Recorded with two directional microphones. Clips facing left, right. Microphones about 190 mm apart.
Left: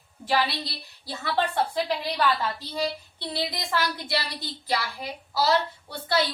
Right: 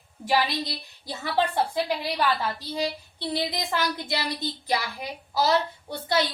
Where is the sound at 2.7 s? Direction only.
15° right (ahead or behind).